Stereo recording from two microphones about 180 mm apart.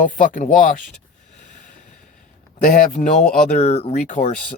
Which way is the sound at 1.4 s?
45° left (ahead or behind).